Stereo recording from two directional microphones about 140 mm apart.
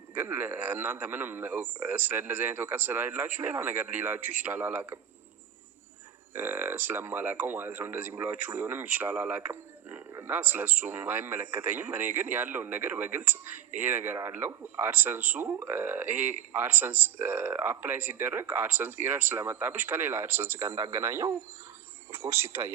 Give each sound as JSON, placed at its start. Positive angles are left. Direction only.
{"t": 0.1, "sound": "speech", "side_deg": -15}
{"t": 6.3, "sound": "speech", "side_deg": -15}